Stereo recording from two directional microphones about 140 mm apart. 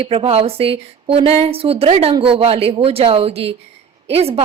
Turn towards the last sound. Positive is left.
turn(degrees=-45)  # may be behind; listen again after turning